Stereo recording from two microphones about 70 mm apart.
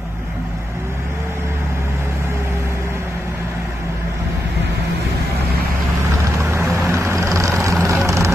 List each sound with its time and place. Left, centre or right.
6.5 s vehicle: right